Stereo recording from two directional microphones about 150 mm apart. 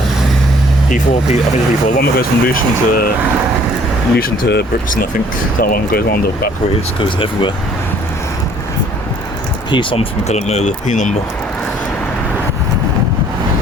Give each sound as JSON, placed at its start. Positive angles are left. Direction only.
{"t": 0.9, "sound": "speech", "side_deg": 55}
{"t": 2.0, "sound": "speech", "side_deg": 75}
{"t": 4.1, "sound": "speech", "side_deg": 90}
{"t": 7.0, "sound": "speech", "side_deg": 35}
{"t": 9.7, "sound": "speech", "side_deg": 35}